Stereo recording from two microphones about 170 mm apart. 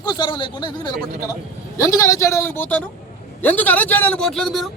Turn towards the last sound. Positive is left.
turn(degrees=0)  # may be behind; listen again after turning